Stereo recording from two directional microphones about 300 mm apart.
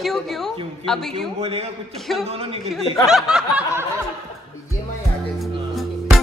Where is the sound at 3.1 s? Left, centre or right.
Centre.